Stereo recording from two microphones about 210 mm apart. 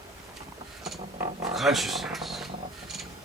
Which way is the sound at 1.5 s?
Centre (ahead or behind).